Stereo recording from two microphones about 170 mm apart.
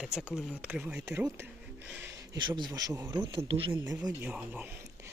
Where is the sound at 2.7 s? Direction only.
20° right (ahead or behind).